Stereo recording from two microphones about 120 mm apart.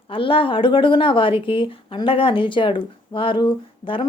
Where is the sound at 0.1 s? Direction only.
45° left (ahead or behind).